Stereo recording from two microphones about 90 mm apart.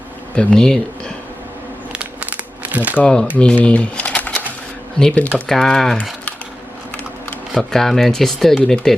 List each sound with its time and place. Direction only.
0.3 s speech: 5° left (ahead or behind)
1.9 s crumpling: 15° right (ahead or behind)
2.9 s speech: 10° left (ahead or behind)
7.5 s speech: 5° left (ahead or behind)